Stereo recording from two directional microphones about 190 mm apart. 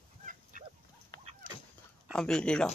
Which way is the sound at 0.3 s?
45° right (ahead or behind).